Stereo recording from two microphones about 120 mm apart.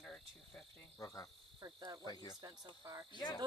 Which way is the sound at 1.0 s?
30° left (ahead or behind).